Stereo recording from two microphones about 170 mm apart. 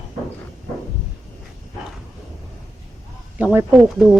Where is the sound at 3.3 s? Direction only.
5° right (ahead or behind).